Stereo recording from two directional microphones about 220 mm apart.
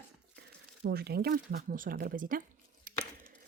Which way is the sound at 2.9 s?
40° right (ahead or behind).